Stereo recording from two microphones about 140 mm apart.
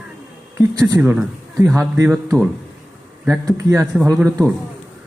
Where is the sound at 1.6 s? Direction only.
20° right (ahead or behind).